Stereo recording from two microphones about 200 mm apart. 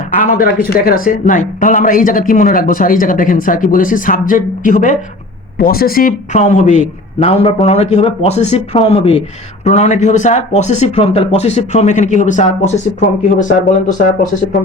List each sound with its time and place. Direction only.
0.3 s speech: 45° left (ahead or behind)